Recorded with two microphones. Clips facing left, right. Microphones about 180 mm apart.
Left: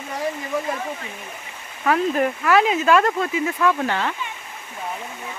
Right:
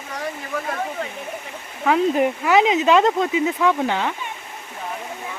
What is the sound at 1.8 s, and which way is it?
Speech, 15° right (ahead or behind).